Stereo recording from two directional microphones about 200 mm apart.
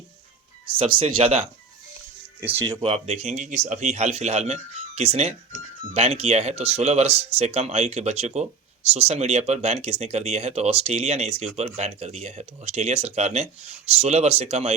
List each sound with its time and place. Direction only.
0.9 s a man's voice: 25° right (ahead or behind)
2.4 s speech: 10° right (ahead or behind)
2.8 s speech: 30° right (ahead or behind)